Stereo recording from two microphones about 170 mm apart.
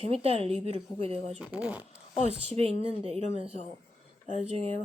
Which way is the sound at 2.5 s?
35° right (ahead or behind).